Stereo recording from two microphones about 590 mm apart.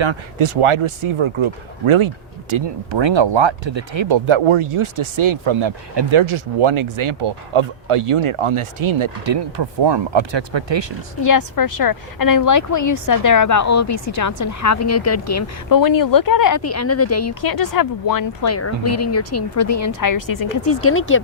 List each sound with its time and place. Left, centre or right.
0.0 s speech: right
11.2 s a woman's voice: left